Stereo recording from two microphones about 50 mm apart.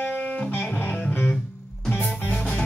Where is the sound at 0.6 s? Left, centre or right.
Left.